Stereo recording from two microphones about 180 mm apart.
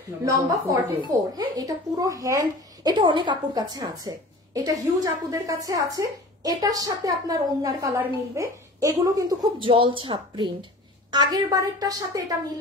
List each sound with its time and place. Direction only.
0.2 s a woman's voice: 20° right (ahead or behind)